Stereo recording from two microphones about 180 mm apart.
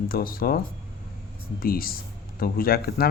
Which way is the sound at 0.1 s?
55° left (ahead or behind).